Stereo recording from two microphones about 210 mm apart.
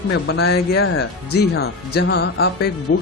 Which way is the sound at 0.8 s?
75° left (ahead or behind).